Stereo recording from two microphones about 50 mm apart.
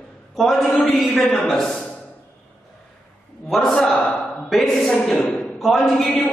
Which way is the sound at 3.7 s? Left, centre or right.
Centre.